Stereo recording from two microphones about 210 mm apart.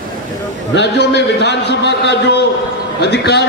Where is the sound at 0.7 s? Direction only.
55° left (ahead or behind).